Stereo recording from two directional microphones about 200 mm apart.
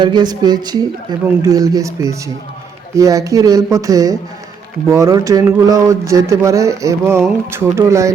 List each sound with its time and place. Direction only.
0.0 s speech: 20° right (ahead or behind)